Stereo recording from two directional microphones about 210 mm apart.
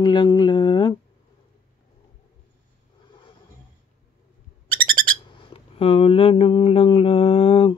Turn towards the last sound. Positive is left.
turn(degrees=25)  # may be behind; listen again after turning